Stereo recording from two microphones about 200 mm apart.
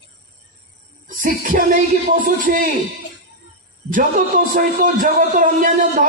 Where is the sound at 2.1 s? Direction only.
45° right (ahead or behind).